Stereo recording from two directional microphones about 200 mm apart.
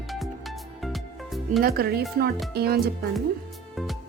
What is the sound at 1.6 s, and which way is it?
Music, 50° right (ahead or behind).